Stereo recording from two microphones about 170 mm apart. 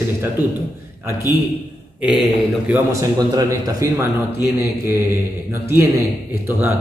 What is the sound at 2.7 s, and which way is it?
A man's voice, 20° right (ahead or behind).